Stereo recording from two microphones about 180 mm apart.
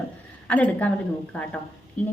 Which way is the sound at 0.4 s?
10° left (ahead or behind).